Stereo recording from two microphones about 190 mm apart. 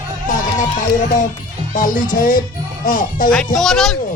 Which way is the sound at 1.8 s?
45° left (ahead or behind).